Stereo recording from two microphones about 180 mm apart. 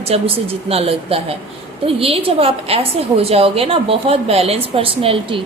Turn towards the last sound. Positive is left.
turn(degrees=-30)  # may be behind; listen again after turning